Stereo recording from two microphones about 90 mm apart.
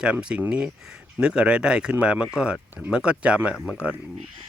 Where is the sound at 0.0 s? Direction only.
10° right (ahead or behind).